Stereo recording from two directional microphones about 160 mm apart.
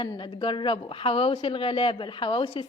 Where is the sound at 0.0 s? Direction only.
30° left (ahead or behind).